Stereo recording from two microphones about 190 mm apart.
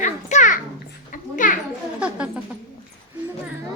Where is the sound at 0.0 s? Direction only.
40° left (ahead or behind).